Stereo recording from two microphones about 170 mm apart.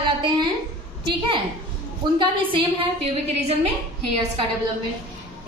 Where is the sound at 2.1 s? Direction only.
30° right (ahead or behind).